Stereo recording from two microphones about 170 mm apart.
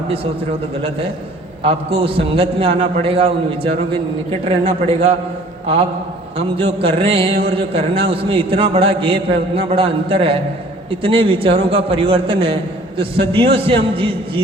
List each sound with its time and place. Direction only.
0.8 s a man's voice: 35° right (ahead or behind)
6.3 s a man's voice: 35° right (ahead or behind)